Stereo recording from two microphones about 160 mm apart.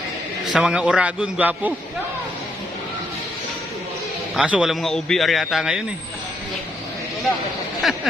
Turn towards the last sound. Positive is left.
turn(degrees=0)  # may be behind; listen again after turning